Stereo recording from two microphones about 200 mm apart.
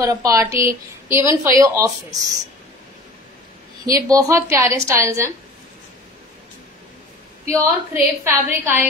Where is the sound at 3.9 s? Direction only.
15° right (ahead or behind).